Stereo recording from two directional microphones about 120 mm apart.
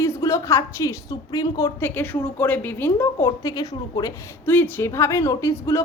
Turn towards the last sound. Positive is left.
turn(degrees=25)  # may be behind; listen again after turning